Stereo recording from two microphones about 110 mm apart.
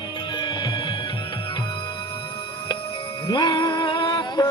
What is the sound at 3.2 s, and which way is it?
Jingle bell, 45° left (ahead or behind).